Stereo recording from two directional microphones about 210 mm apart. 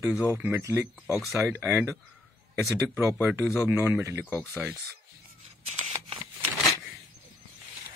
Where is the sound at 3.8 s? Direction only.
10° right (ahead or behind).